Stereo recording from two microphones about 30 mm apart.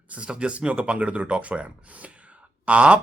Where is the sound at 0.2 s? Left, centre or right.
Right.